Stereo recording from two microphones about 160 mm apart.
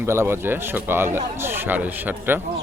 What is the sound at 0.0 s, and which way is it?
A man's voice, 15° right (ahead or behind).